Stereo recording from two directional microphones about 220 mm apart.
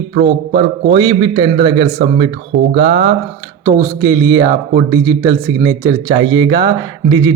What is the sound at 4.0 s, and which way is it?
Speech, 15° right (ahead or behind).